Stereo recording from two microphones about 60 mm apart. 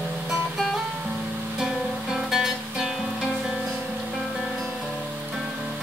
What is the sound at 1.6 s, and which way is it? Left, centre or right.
Music, centre.